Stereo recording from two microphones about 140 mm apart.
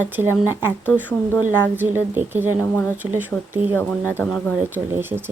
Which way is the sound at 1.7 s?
15° right (ahead or behind).